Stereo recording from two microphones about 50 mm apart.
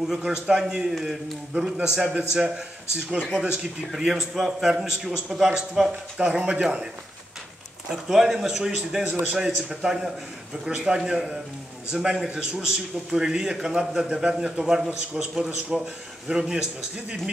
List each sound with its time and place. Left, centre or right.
0.0 s a man's voice: centre
7.9 s a man's voice: centre